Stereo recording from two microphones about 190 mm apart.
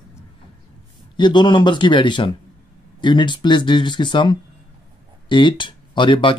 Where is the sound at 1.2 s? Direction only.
25° left (ahead or behind).